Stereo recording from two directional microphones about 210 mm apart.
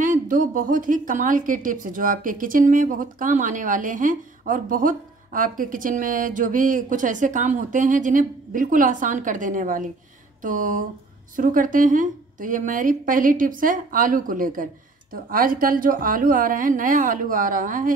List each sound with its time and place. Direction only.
0.0 s a woman's voice: 40° right (ahead or behind)